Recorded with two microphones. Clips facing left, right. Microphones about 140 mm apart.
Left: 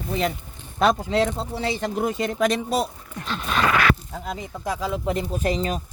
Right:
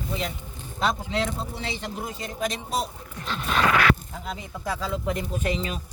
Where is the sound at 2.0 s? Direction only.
70° left (ahead or behind).